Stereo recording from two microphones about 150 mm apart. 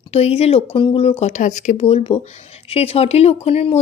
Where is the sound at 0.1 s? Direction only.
45° left (ahead or behind).